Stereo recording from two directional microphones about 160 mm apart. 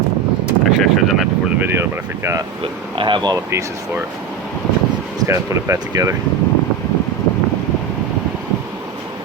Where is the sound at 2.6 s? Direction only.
30° right (ahead or behind).